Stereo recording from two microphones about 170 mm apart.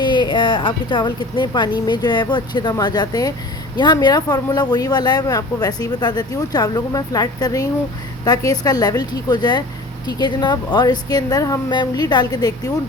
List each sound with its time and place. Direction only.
0.0 s speech: 25° left (ahead or behind)